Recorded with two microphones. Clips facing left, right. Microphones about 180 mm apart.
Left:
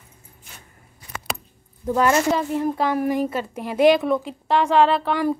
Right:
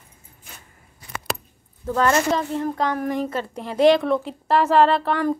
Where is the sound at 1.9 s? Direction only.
10° left (ahead or behind).